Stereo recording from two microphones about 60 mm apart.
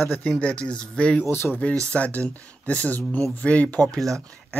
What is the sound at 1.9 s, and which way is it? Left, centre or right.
Speech, left.